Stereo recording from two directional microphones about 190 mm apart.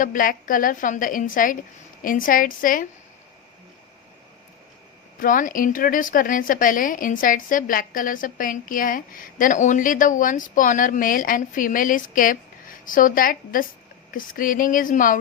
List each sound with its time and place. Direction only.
0.0 s a woman's voice: 45° left (ahead or behind)
5.2 s a woman's voice: 45° left (ahead or behind)